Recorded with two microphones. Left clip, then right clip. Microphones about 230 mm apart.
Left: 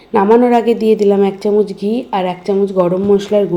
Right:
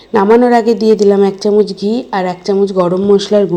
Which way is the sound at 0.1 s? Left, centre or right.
Centre.